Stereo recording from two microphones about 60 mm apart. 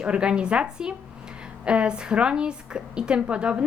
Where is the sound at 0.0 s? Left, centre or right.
Centre.